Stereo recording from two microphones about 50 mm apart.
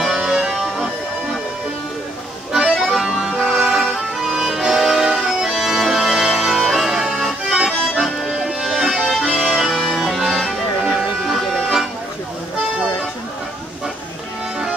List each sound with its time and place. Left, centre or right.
0.2 s music: centre
2.5 s accordion: centre
3.5 s music: centre
5.3 s accordion: centre
9.1 s accordion: centre
9.5 s music: centre